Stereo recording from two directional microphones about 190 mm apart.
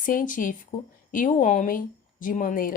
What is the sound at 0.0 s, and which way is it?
Speech, 45° left (ahead or behind).